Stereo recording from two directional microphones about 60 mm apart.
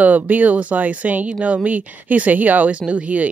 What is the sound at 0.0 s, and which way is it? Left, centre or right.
A woman's voice, right.